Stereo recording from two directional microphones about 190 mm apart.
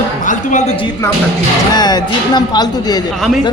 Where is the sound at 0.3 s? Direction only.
40° left (ahead or behind).